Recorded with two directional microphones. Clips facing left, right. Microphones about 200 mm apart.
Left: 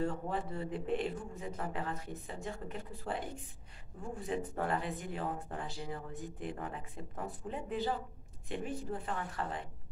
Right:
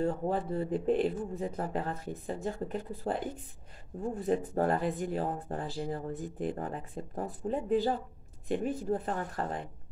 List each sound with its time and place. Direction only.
0.0 s speech: 35° right (ahead or behind)